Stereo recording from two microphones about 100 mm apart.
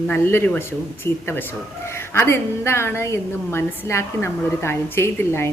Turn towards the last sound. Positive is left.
turn(degrees=25)  # may be behind; listen again after turning